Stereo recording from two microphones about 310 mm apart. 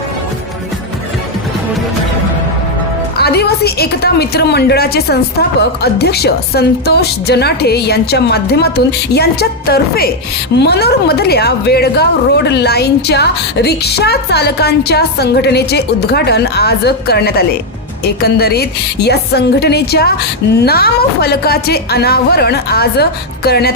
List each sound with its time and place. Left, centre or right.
3.2 s a woman's voice: left